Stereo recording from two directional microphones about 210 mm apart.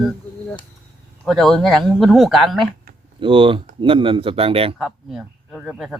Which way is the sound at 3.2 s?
25° right (ahead or behind).